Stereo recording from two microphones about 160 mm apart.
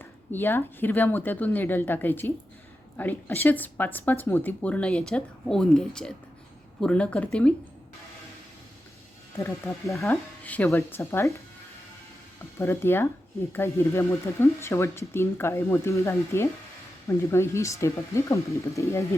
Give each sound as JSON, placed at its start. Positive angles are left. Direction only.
{"t": 0.0, "sound": "speech", "side_deg": 10}
{"t": 9.4, "sound": "speech", "side_deg": 20}
{"t": 12.5, "sound": "speech", "side_deg": 15}